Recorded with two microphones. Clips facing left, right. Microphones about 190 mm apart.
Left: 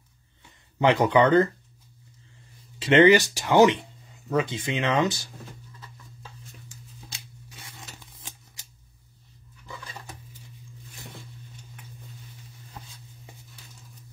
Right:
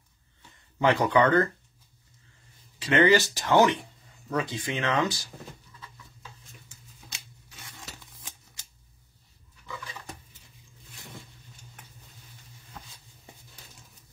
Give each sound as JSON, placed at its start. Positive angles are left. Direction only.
{"t": 0.7, "sound": "speech", "side_deg": 20}
{"t": 2.8, "sound": "speech", "side_deg": 25}